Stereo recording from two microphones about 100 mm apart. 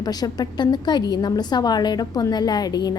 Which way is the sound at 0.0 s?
40° left (ahead or behind).